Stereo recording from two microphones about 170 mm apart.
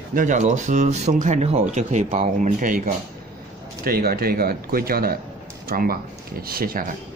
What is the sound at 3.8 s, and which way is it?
Speech, 65° right (ahead or behind).